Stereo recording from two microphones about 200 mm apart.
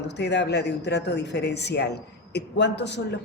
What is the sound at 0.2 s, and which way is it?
Speech, 60° left (ahead or behind).